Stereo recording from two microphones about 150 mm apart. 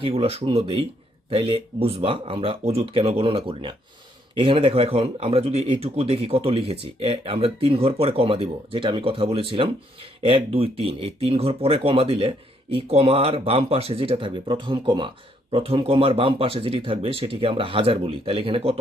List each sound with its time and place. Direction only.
0.0 s speech: 35° right (ahead or behind)